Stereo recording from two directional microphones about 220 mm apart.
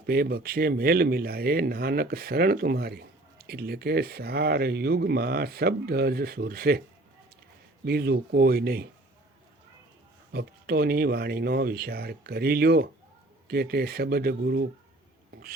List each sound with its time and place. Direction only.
0.0 s speech: 45° right (ahead or behind)
7.9 s speech: 45° right (ahead or behind)
10.3 s speech: 45° right (ahead or behind)